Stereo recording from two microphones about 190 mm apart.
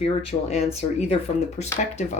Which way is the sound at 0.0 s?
30° left (ahead or behind).